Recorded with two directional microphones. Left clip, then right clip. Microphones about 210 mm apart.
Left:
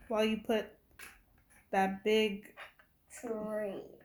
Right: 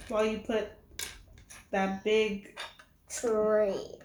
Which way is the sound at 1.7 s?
35° left (ahead or behind).